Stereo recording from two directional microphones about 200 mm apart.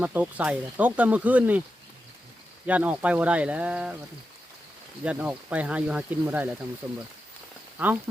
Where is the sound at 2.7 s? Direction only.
10° right (ahead or behind).